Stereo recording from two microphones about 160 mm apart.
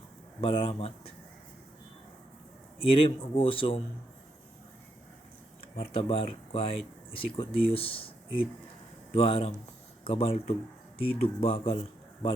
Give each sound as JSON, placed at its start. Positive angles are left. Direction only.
{"t": 0.4, "sound": "speech", "side_deg": 35}
{"t": 2.7, "sound": "speech", "side_deg": 35}
{"t": 5.7, "sound": "speech", "side_deg": 35}
{"t": 9.1, "sound": "a man's voice", "side_deg": 35}